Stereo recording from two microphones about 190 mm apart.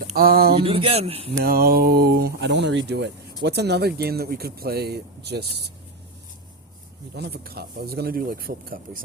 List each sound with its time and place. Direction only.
0.2 s speech: 55° right (ahead or behind)
0.6 s speech: 30° right (ahead or behind)
1.5 s speech: 50° right (ahead or behind)
7.2 s speech: 55° right (ahead or behind)